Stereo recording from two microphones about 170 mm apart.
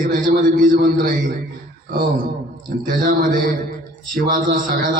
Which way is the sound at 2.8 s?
55° right (ahead or behind).